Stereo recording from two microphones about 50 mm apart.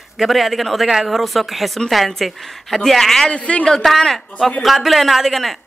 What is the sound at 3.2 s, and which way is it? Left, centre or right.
Speech, left.